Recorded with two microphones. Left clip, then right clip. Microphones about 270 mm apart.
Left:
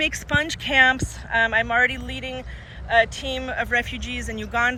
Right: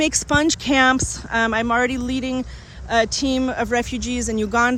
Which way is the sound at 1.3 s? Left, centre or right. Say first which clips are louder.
Even; right.